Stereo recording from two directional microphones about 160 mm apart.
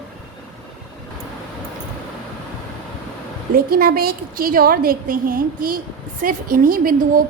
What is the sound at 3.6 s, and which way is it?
A woman's voice, 70° right (ahead or behind).